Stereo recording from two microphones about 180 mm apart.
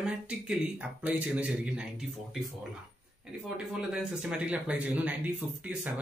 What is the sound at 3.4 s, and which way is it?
Speech, 5° right (ahead or behind).